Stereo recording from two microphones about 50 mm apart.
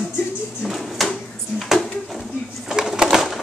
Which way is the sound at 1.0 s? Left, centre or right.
Centre.